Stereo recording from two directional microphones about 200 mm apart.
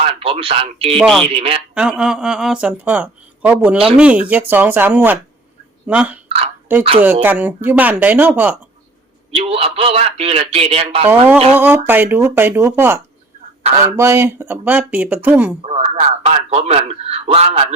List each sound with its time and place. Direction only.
0.0 s speech: 30° right (ahead or behind)
0.9 s speech: 5° left (ahead or behind)
1.3 s speech: 30° right (ahead or behind)
1.7 s speech: 5° right (ahead or behind)
6.2 s a sound: 30° right (ahead or behind)
7.0 s speech: 10° right (ahead or behind)
9.3 s speech: 30° right (ahead or behind)
11.5 s speech: 10° right (ahead or behind)
15.6 s a man's voice: 30° right (ahead or behind)